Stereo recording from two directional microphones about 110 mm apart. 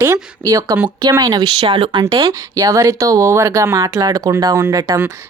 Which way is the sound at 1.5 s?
55° right (ahead or behind).